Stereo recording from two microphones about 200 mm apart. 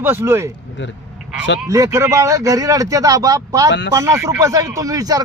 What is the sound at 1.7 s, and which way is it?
Speech, 15° right (ahead or behind).